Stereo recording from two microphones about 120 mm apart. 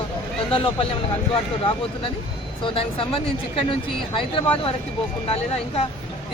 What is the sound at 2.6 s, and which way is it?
Speech, 50° left (ahead or behind).